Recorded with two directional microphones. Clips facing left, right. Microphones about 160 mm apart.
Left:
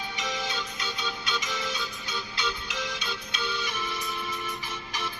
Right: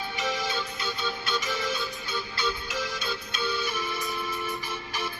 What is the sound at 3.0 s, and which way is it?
Music, 50° right (ahead or behind).